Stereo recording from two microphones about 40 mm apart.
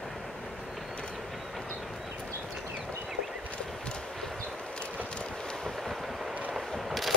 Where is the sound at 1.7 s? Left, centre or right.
Centre.